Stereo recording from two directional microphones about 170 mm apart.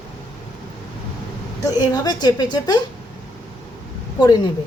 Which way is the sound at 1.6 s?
25° left (ahead or behind).